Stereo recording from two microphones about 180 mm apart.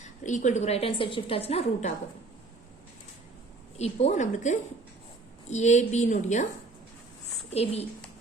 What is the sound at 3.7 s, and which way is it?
A woman's voice, 35° left (ahead or behind).